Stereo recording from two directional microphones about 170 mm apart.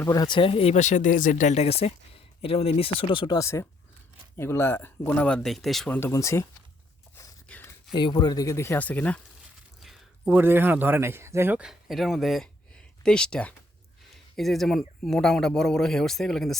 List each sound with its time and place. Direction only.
0.0 s speech: 20° left (ahead or behind); by 6.0 s centre (ahead or behind)
6.0 s speech: 15° left (ahead or behind)
7.4 s a sound: 10° left (ahead or behind)
7.9 s speech: 25° left (ahead or behind); by 9.2 s 10° left (ahead or behind)
9.8 s speech: 5° right (ahead or behind)